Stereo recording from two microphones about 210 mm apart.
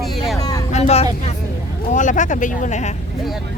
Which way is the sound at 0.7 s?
30° left (ahead or behind).